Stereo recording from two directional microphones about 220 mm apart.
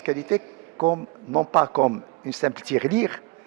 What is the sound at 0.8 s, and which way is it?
A man's voice, 25° right (ahead or behind).